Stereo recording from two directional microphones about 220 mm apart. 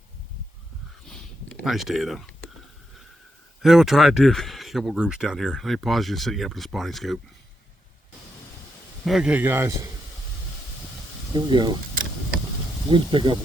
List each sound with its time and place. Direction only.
1.0 s a sound: 5° left (ahead or behind)
3.6 s speech: centre (ahead or behind)
9.0 s a man's voice: 5° right (ahead or behind)
11.3 s speech: 20° right (ahead or behind)